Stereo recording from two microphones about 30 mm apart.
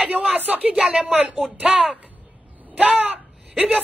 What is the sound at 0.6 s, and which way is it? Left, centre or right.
Speech, right.